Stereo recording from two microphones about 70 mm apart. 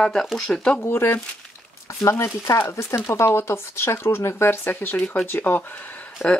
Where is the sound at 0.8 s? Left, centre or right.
Left.